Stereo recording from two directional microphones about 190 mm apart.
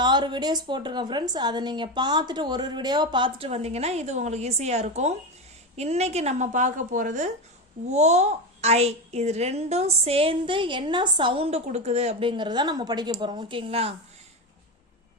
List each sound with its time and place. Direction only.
0.0 s a woman's voice: 25° right (ahead or behind)